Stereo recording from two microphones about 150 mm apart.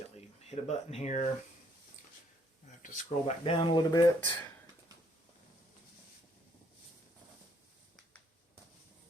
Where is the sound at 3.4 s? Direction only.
35° left (ahead or behind).